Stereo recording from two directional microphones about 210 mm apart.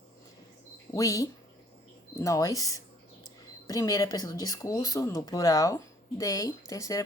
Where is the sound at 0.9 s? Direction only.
15° left (ahead or behind).